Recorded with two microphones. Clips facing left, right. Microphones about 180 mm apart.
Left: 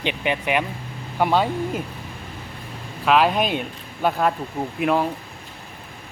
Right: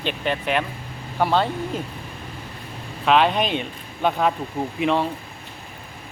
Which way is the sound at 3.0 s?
5° left (ahead or behind).